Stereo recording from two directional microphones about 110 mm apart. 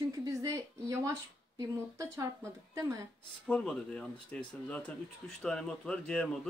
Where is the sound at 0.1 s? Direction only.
30° right (ahead or behind).